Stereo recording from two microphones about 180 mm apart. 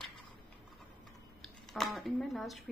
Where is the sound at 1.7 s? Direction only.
Centre (ahead or behind).